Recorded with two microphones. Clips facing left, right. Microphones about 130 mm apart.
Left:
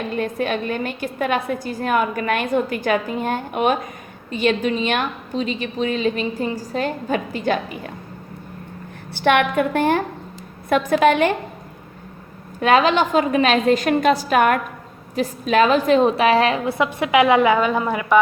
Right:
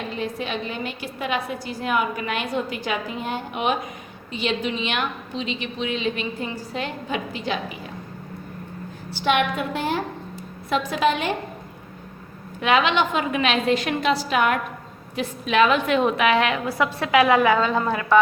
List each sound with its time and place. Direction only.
0.1 s a woman's voice: 55° left (ahead or behind)
9.0 s a woman's voice: 60° left (ahead or behind)
12.5 s a woman's voice: 40° left (ahead or behind)
16.7 s a woman's voice: 20° left (ahead or behind)